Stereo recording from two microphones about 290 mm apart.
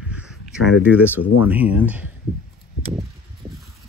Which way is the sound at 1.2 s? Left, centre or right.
Left.